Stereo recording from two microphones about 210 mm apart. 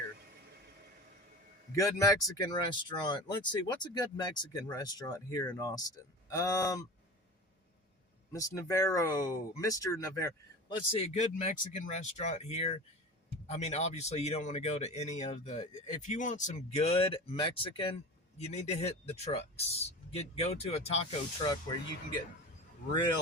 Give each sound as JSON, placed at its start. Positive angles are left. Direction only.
{"t": 1.7, "sound": "speech", "side_deg": 15}
{"t": 8.3, "sound": "speech", "side_deg": 15}